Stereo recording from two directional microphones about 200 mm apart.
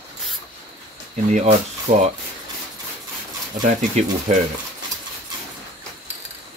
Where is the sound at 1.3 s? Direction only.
35° right (ahead or behind).